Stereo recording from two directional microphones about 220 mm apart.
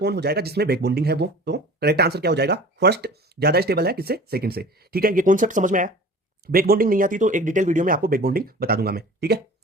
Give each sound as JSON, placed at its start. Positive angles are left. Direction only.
{"t": 0.0, "sound": "speech", "side_deg": -50}